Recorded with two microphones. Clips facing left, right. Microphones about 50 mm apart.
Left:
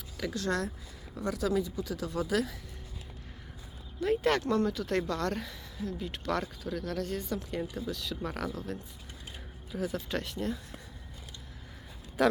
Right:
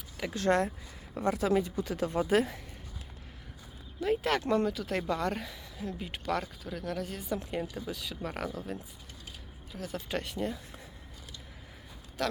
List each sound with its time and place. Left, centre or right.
0.3 s speech: right
4.0 s speech: centre
9.7 s speech: centre
10.1 s speech: centre
12.2 s speech: centre